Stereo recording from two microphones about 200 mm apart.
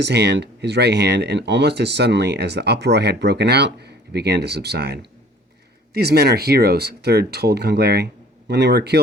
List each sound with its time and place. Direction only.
0.0 s speech: 55° right (ahead or behind)